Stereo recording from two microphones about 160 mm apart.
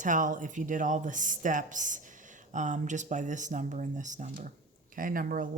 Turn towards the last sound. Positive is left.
turn(degrees=-60)  # may be behind; listen again after turning